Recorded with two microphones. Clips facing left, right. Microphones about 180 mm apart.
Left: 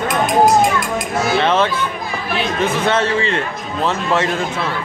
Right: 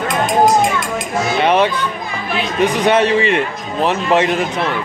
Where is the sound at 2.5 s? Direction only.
15° right (ahead or behind).